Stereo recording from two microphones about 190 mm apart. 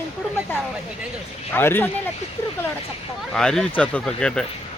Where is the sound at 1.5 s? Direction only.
10° left (ahead or behind).